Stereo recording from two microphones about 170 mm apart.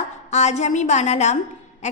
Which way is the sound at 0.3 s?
40° left (ahead or behind).